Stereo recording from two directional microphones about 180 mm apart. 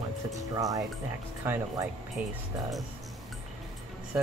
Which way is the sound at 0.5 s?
20° right (ahead or behind).